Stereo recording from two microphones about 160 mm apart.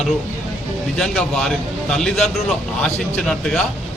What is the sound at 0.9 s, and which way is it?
Speech, 5° left (ahead or behind).